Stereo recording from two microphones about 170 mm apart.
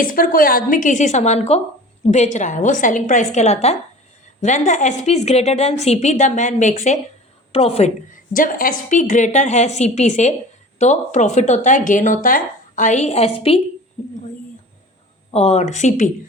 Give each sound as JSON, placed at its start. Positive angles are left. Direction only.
{"t": 0.0, "sound": "a woman's voice", "side_deg": 55}
{"t": 15.3, "sound": "a woman's voice", "side_deg": 40}